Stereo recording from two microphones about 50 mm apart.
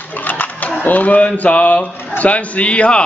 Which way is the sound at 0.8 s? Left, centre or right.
Left.